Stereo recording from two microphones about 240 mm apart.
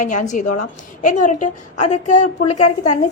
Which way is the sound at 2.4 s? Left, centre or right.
Left.